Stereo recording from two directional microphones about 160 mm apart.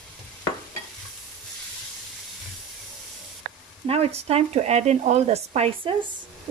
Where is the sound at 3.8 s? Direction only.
40° right (ahead or behind).